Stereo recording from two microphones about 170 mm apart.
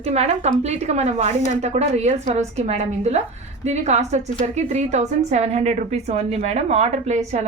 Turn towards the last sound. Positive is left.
turn(degrees=-40)  # may be behind; listen again after turning